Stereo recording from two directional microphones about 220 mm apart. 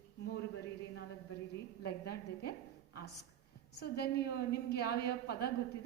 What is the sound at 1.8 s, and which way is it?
A woman's voice, 45° left (ahead or behind).